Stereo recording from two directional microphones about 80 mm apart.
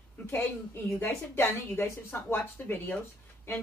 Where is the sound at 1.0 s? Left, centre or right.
Left.